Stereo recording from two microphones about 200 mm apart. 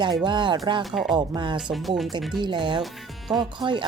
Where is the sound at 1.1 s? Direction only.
25° right (ahead or behind).